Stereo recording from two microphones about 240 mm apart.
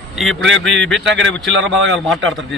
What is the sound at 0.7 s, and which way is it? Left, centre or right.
Speech, right.